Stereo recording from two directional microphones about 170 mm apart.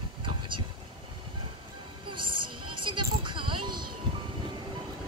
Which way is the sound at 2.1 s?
30° right (ahead or behind).